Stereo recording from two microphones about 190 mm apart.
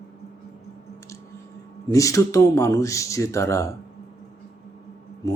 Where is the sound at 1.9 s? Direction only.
15° left (ahead or behind).